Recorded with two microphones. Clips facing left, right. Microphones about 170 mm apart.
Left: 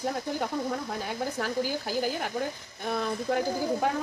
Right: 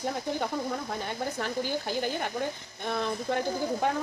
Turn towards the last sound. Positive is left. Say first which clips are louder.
# left 1 dB
turn(degrees=5)  # may be behind; listen again after turning